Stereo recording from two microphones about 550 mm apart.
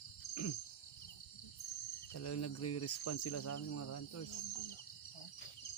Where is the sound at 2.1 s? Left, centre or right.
Left.